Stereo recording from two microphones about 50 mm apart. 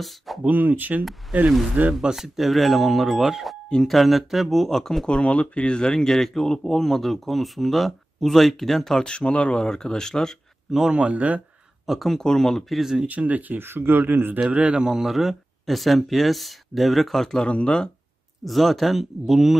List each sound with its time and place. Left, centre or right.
0.5 s speech: right
2.1 s speech: centre
5.0 s speech: left
10.7 s speech: centre
11.0 s speech: right
11.8 s speech: centre
12.2 s speech: centre
12.7 s speech: centre
13.1 s speech: right
13.6 s a man's voice: right
14.4 s speech: right; by 17.5 s centre
17.5 s speech: left
18.4 s speech: centre